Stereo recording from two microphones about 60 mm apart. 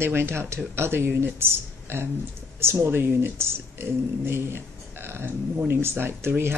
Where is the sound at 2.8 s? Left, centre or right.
Right.